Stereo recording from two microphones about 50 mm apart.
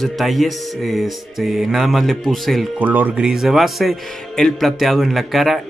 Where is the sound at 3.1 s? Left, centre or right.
Centre.